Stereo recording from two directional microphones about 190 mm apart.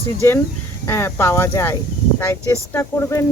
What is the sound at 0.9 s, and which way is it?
Speech, 15° left (ahead or behind).